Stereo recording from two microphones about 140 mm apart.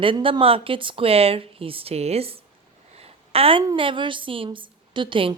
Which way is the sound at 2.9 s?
45° right (ahead or behind).